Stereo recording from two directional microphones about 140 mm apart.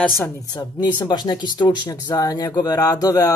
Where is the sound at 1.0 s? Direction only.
30° left (ahead or behind).